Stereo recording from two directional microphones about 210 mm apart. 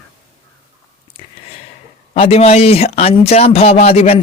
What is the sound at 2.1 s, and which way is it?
Speech, 30° left (ahead or behind).